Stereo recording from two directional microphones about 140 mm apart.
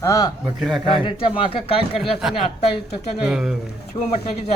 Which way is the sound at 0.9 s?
40° left (ahead or behind).